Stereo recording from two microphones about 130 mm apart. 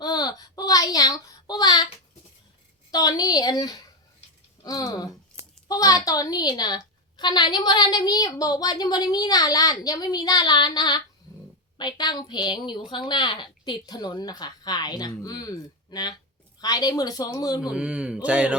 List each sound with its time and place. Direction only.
0.0 s child singing: 30° left (ahead or behind)
2.9 s a sound: 30° left (ahead or behind)
6.1 s a woman's voice: 30° left (ahead or behind)
17.6 s speech: 10° right (ahead or behind)